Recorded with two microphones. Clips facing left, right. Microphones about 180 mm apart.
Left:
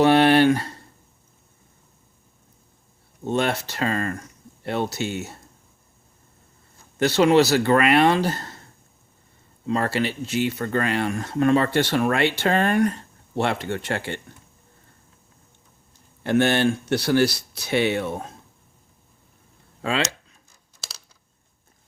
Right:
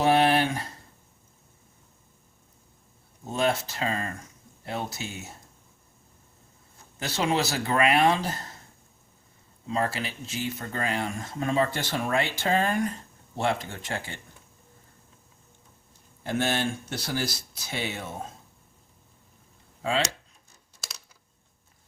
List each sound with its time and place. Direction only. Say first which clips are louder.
0.0 s a sound: left 6 dB; 70° left (ahead or behind)
3.2 s speech: left 3 dB; 70° left (ahead or behind)
7.0 s speech: left 10 dB; 70° left (ahead or behind)
9.6 s speech: left 6 dB; 65° left (ahead or behind)
16.2 s speech: left 8 dB; 70° left (ahead or behind)
19.8 s speech: left 2 dB; 70° left (ahead or behind)